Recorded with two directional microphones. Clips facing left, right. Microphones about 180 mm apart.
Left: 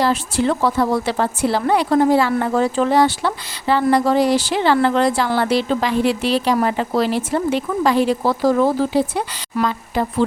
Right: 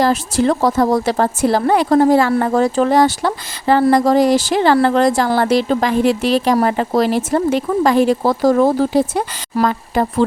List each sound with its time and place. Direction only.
0.0 s speech: 40° right (ahead or behind)